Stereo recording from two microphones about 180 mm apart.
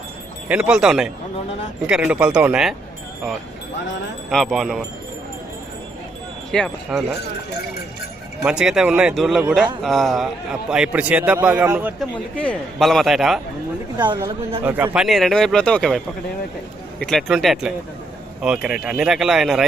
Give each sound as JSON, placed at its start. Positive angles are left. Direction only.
{"t": 0.4, "sound": "a man's voice", "side_deg": -5}
{"t": 4.3, "sound": "a man's voice", "side_deg": 0}
{"t": 6.5, "sound": "a man's voice", "side_deg": 5}
{"t": 8.4, "sound": "a man's voice", "side_deg": -5}
{"t": 12.4, "sound": "a man's voice", "side_deg": 5}
{"t": 13.9, "sound": "speech", "side_deg": -20}
{"t": 14.6, "sound": "a man's voice", "side_deg": -10}
{"t": 14.9, "sound": "a man's voice", "side_deg": 0}
{"t": 17.0, "sound": "a man's voice", "side_deg": 0}